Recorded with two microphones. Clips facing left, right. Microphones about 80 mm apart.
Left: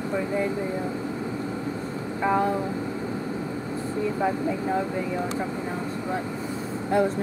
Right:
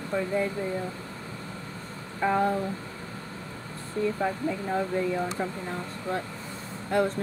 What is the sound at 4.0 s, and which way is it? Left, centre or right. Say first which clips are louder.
Speech: left 1 dB; centre.